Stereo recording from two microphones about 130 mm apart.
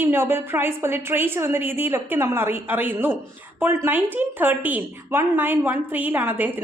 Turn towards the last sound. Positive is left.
turn(degrees=-15)  # may be behind; listen again after turning